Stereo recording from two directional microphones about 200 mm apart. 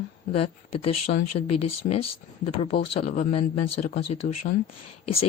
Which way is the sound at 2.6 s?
30° left (ahead or behind).